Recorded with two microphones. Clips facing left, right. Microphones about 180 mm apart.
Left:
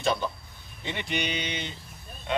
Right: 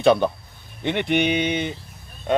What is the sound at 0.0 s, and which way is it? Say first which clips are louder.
Speech: right 10 dB; 65° right (ahead or behind).